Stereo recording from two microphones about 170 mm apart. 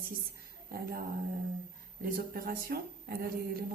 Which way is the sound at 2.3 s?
60° right (ahead or behind).